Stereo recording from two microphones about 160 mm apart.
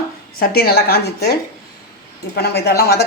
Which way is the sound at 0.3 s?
70° left (ahead or behind).